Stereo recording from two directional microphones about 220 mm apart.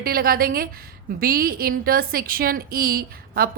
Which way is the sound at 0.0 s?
40° right (ahead or behind).